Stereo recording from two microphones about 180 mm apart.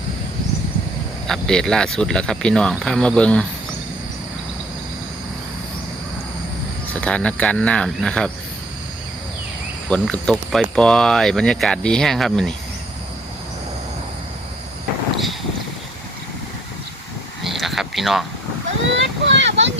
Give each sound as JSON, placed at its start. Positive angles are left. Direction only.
{"t": 1.3, "sound": "speech", "side_deg": 5}
{"t": 7.0, "sound": "speech", "side_deg": 5}
{"t": 9.9, "sound": "speech", "side_deg": 5}
{"t": 17.4, "sound": "a sound", "side_deg": 0}
{"t": 18.9, "sound": "speech", "side_deg": -90}